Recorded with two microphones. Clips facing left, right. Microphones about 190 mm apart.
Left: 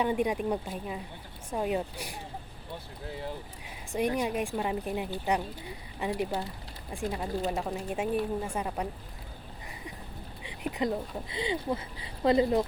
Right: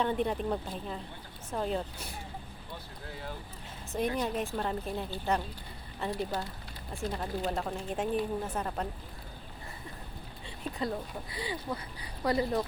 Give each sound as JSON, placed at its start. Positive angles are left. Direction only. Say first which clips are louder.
{"t": 0.0, "sound": "speech", "louder": "left 2 dB", "side_deg": 10}
{"t": 3.9, "sound": "speech", "louder": "left 2 dB", "side_deg": 10}
{"t": 10.4, "sound": "speech", "louder": "left 4 dB", "side_deg": 15}